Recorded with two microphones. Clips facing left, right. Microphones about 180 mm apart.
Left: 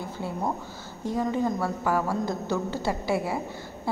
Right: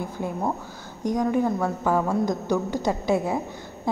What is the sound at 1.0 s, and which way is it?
A woman's voice, 15° right (ahead or behind).